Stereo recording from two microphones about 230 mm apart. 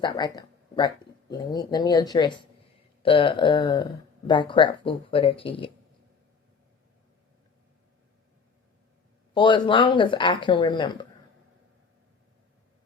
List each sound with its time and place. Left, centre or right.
0.0 s speech: centre
9.3 s speech: left